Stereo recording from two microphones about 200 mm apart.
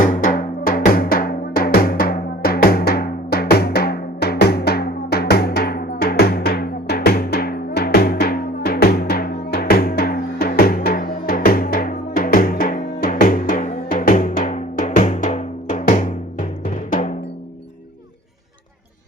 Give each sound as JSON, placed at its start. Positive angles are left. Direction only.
{"t": 0.0, "sound": "drum", "side_deg": 40}